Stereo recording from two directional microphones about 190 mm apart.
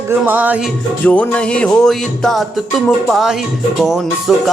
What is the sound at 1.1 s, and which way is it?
Speech, 5° left (ahead or behind).